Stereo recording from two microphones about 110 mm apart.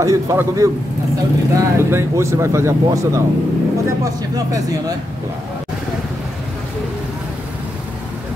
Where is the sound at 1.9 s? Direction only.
25° right (ahead or behind).